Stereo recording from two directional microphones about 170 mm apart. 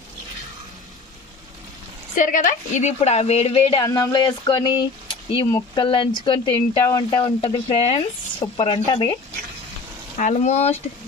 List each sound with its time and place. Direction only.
2.1 s speech: 50° left (ahead or behind)
3.8 s speech: 20° left (ahead or behind)
10.1 s speech: 45° left (ahead or behind)